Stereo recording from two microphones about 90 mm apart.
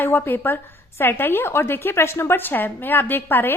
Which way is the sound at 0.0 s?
20° left (ahead or behind).